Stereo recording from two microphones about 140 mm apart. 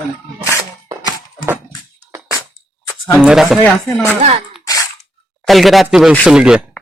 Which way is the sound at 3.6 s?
15° left (ahead or behind).